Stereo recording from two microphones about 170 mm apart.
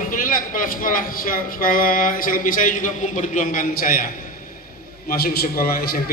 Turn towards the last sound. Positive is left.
turn(degrees=60)  # may be behind; listen again after turning